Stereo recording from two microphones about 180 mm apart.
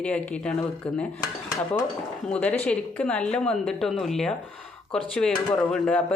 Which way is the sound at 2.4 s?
5° left (ahead or behind).